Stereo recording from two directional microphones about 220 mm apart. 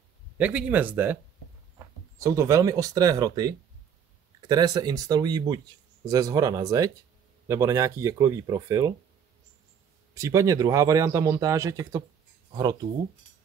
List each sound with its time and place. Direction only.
0.4 s speech: 5° right (ahead or behind)
2.1 s speech: 15° right (ahead or behind)
10.1 s speech: 15° right (ahead or behind)